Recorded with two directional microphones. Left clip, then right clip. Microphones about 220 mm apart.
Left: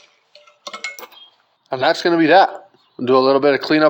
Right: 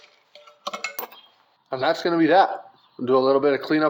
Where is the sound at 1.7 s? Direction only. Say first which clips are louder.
Left 6 dB; 35° left (ahead or behind).